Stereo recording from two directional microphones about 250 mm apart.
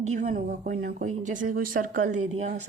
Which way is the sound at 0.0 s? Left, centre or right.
Right.